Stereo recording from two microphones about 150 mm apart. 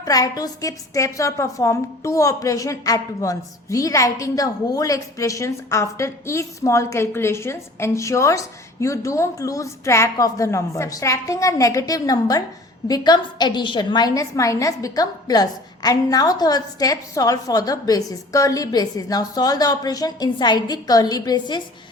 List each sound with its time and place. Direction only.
0.0 s a woman's voice: 25° left (ahead or behind)